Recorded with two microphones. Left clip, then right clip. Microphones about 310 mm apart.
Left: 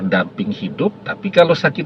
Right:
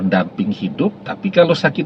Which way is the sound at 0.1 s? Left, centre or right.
Left.